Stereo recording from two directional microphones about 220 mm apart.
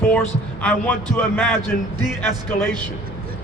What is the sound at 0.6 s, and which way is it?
Speech, 5° left (ahead or behind).